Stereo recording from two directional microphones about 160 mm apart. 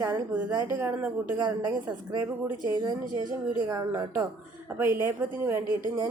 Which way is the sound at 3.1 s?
55° right (ahead or behind).